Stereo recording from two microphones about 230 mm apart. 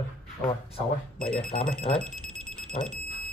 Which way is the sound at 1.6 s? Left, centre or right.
Centre.